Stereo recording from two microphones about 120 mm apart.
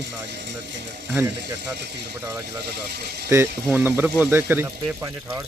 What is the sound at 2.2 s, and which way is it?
Speech, 25° right (ahead or behind).